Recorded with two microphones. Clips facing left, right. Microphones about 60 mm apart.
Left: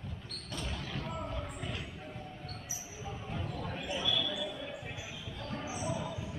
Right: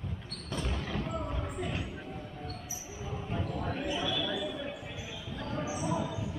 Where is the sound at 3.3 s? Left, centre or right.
Right.